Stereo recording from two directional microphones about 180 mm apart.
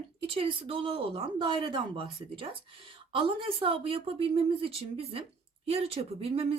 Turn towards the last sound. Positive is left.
turn(degrees=-35)  # may be behind; listen again after turning